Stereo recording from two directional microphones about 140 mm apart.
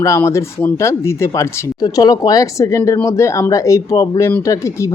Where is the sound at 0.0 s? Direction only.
20° left (ahead or behind).